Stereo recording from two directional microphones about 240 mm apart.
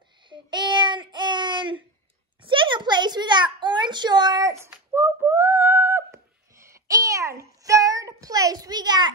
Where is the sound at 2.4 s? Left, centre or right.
Centre.